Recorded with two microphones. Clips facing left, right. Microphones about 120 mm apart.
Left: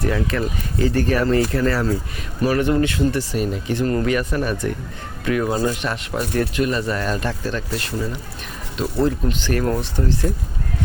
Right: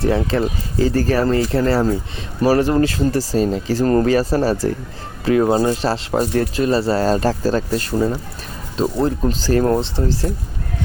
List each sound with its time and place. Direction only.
0.0 s speech: 30° right (ahead or behind); by 8.2 s 45° right (ahead or behind)
8.8 s speech: 30° right (ahead or behind)